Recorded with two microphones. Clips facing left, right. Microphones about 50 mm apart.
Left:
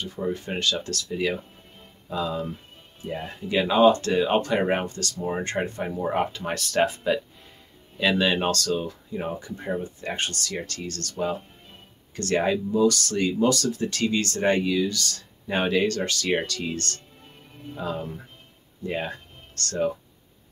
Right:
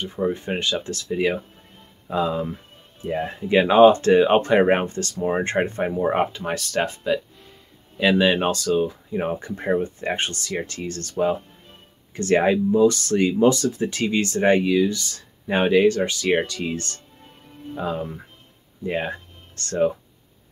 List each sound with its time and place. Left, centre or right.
0.0 s speech: right
6.3 s speech: centre
8.0 s speech: centre
9.2 s speech: right
10.0 s speech: right